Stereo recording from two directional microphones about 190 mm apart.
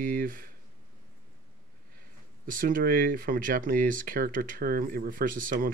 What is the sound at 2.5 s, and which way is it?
Speech, 45° right (ahead or behind).